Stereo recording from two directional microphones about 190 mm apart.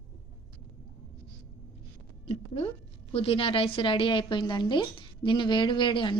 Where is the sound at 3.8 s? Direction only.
25° left (ahead or behind).